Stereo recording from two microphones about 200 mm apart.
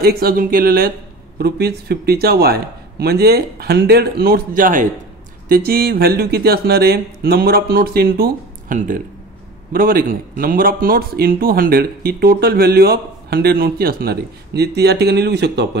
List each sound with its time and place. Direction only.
0.0 s speech: 50° right (ahead or behind)